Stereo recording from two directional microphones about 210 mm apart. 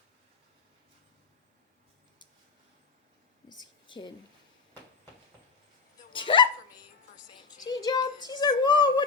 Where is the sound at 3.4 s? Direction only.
20° left (ahead or behind).